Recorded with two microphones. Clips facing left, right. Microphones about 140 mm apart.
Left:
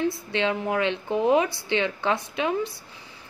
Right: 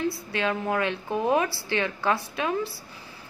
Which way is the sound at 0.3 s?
25° left (ahead or behind).